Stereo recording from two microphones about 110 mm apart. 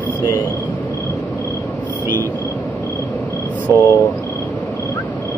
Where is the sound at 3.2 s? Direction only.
15° left (ahead or behind).